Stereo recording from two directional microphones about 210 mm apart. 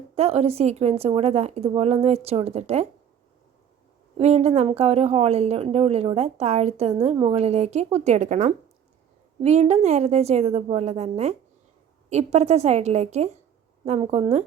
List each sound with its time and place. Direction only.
0.2 s a woman's voice: 30° right (ahead or behind)
4.2 s a woman's voice: 30° right (ahead or behind)